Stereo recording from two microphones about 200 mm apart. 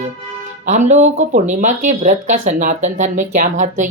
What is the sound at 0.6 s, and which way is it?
Speech, 40° right (ahead or behind).